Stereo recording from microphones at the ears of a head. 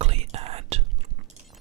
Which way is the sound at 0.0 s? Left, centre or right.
Right.